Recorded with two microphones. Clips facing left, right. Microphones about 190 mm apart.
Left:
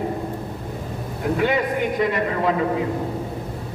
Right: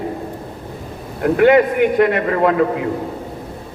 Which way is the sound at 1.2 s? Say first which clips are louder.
Right 9 dB; 65° right (ahead or behind).